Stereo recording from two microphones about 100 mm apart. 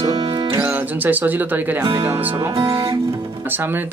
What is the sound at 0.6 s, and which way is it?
Speech, 20° right (ahead or behind).